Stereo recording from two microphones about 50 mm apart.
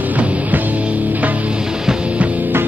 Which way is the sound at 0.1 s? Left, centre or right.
Right.